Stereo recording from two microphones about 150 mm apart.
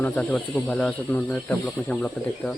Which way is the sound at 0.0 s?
10° left (ahead or behind).